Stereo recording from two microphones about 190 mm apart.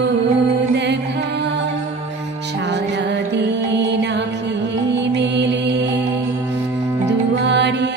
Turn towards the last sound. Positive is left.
turn(degrees=-65)  # may be behind; listen again after turning